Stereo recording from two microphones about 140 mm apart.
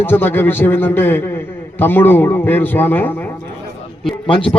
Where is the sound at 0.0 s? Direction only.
15° left (ahead or behind).